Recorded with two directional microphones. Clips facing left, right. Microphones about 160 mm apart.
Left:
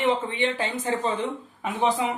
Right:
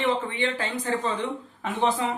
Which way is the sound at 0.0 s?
20° left (ahead or behind).